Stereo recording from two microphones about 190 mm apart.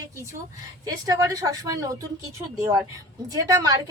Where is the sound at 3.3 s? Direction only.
20° right (ahead or behind).